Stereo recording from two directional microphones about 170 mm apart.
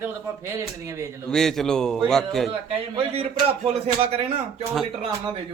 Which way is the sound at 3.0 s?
35° right (ahead or behind).